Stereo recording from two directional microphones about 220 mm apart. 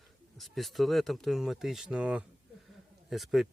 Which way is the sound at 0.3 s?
Centre (ahead or behind).